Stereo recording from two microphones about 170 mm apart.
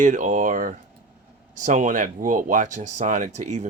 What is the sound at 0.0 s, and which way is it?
Speech, 50° right (ahead or behind).